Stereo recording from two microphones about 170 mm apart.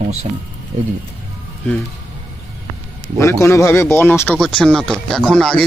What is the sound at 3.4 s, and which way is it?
Speech, 15° left (ahead or behind).